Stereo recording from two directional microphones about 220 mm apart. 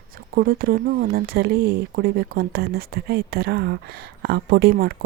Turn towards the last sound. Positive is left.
turn(degrees=-40)  # may be behind; listen again after turning